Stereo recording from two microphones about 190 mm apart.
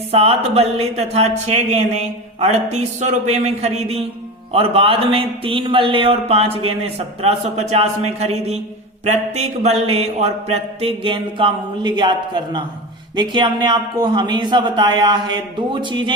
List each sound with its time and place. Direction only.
0.1 s speech: 30° right (ahead or behind)
9.0 s mantra: 35° right (ahead or behind)